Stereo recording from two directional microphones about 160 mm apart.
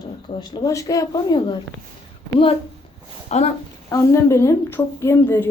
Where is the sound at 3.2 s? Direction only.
45° left (ahead or behind).